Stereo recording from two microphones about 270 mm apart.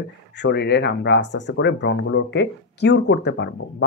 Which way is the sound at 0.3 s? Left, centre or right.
Left.